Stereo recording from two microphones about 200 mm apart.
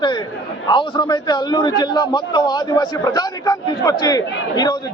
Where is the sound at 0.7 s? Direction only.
25° left (ahead or behind).